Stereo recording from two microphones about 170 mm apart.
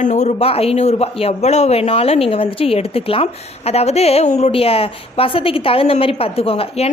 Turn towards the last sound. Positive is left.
turn(degrees=35)  # may be behind; listen again after turning